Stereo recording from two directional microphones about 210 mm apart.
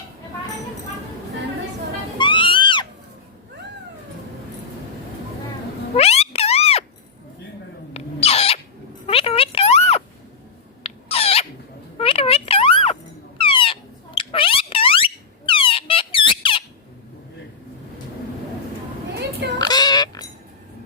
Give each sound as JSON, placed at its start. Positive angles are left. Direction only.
{"t": 2.1, "sound": "music", "side_deg": 25}
{"t": 6.0, "sound": "a sound", "side_deg": 30}
{"t": 7.9, "sound": "owl", "side_deg": 30}
{"t": 9.0, "sound": "music", "side_deg": 25}
{"t": 10.8, "sound": "rodents", "side_deg": 30}
{"t": 11.9, "sound": "a sound", "side_deg": 25}
{"t": 19.5, "sound": "pig", "side_deg": 20}